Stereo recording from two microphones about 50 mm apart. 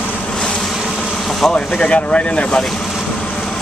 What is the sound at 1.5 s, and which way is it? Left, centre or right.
Speech, left.